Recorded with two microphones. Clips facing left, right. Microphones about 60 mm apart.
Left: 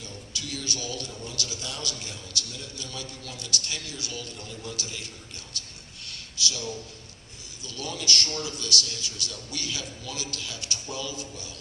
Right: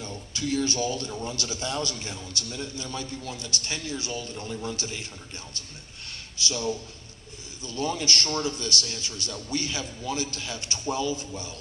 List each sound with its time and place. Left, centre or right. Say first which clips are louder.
0.0 s a man's voice: right 6 dB; right
6.1 s a sound: right 1 dB; right
7.6 s a man's voice: right 6 dB; right